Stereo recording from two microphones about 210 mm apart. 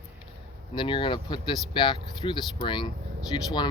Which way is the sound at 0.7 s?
25° left (ahead or behind).